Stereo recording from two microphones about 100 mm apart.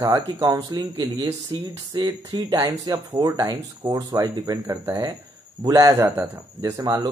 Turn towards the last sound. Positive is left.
turn(degrees=-40)  # may be behind; listen again after turning